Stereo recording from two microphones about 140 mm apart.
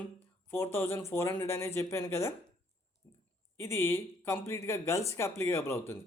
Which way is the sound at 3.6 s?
15° left (ahead or behind).